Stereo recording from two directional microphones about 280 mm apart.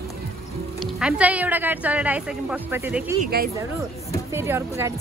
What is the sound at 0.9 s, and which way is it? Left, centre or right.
Speech, centre.